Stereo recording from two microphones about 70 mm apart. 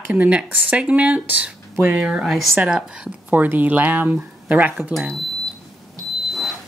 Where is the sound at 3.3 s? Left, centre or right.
Right.